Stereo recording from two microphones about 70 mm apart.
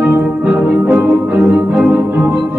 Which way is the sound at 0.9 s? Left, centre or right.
Centre.